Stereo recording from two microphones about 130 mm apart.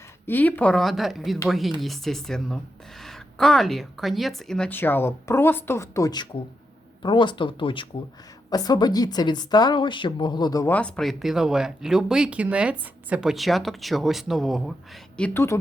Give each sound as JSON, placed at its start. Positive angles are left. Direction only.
{"t": 0.3, "sound": "speech", "side_deg": 15}
{"t": 4.7, "sound": "a woman's voice", "side_deg": 15}
{"t": 10.7, "sound": "speech", "side_deg": 10}
{"t": 15.1, "sound": "speech", "side_deg": 10}